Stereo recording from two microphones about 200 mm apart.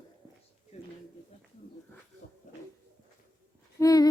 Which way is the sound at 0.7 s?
35° left (ahead or behind).